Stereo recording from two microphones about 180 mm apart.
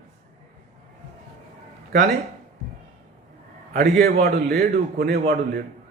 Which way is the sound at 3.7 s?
45° right (ahead or behind).